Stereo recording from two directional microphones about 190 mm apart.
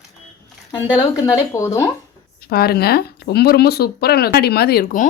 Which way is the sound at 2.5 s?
55° left (ahead or behind).